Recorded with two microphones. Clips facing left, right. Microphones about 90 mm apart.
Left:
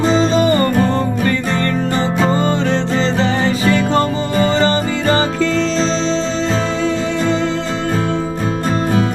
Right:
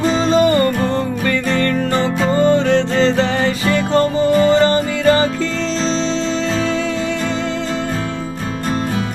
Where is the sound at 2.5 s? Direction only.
55° right (ahead or behind).